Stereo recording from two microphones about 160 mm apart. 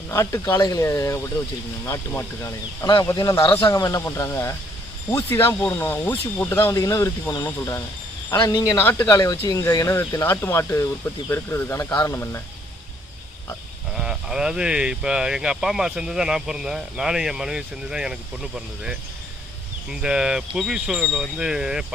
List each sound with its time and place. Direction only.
0.1 s speech: 20° left (ahead or behind)
13.9 s speech: 5° right (ahead or behind)